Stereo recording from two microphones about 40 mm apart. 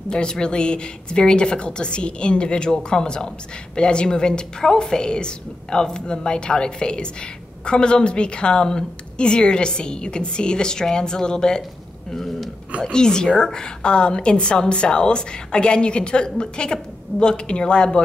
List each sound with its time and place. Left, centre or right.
0.1 s a woman's voice: left
12.1 s speech: centre
12.8 s a woman's voice: centre